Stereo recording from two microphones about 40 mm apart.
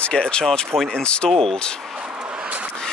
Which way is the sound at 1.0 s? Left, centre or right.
Left.